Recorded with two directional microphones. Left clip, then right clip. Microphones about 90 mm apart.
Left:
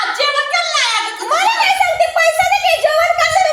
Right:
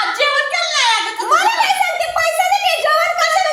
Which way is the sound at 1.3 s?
30° right (ahead or behind).